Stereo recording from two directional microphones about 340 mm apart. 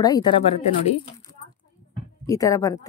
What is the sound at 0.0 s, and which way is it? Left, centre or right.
Speech, centre.